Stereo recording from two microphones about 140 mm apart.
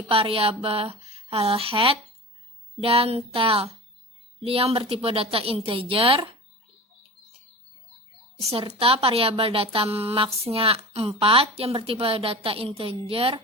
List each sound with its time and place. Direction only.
0.1 s a woman's voice: 40° right (ahead or behind)
8.4 s a woman's voice: 45° right (ahead or behind)